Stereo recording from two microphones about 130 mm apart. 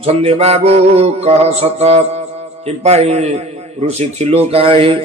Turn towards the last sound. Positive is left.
turn(degrees=-45)  # may be behind; listen again after turning